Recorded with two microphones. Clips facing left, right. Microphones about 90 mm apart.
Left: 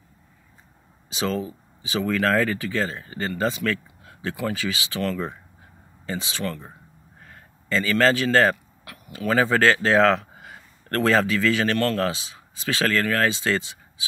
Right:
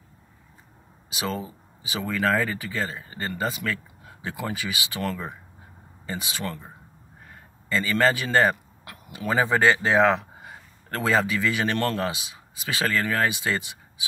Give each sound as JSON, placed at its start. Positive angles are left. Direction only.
{"t": 1.1, "sound": "speech", "side_deg": -5}
{"t": 7.9, "sound": "a man's voice", "side_deg": -15}